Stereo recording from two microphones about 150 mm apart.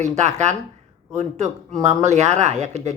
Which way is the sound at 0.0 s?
50° right (ahead or behind).